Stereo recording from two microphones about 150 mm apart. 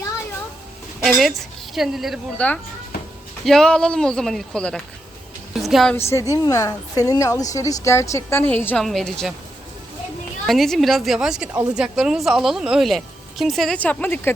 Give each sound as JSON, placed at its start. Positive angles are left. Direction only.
{"t": 1.0, "sound": "a woman's voice", "side_deg": 0}
{"t": 2.4, "sound": "a woman's voice", "side_deg": 10}
{"t": 6.1, "sound": "a woman's voice", "side_deg": 20}
{"t": 10.4, "sound": "a woman's voice", "side_deg": 0}